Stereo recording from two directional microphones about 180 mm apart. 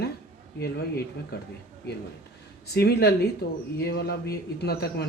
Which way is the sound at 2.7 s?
65° left (ahead or behind).